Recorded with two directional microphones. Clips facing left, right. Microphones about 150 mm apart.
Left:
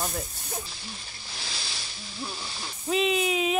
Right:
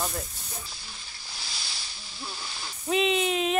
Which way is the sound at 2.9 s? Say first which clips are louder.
Even; centre (ahead or behind).